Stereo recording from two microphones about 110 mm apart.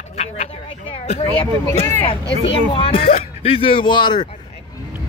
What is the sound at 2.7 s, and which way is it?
Speech, 55° left (ahead or behind).